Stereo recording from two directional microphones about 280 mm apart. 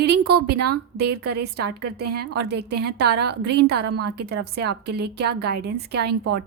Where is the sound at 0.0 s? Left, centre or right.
Right.